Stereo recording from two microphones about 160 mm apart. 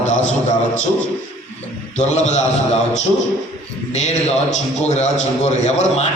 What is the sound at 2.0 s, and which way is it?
Speech, 45° left (ahead or behind).